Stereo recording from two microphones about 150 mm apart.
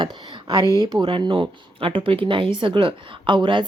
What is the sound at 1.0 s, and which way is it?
Speech, 35° right (ahead or behind).